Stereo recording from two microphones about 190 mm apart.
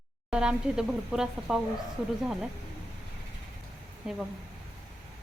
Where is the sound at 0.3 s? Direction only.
5° right (ahead or behind).